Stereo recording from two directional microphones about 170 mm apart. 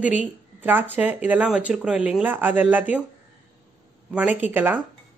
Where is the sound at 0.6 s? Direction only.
10° right (ahead or behind).